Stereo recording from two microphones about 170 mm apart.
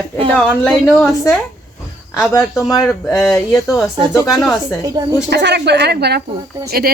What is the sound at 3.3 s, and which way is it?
Speech, 15° left (ahead or behind).